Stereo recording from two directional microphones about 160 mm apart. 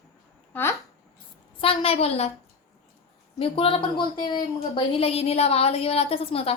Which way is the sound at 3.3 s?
35° left (ahead or behind).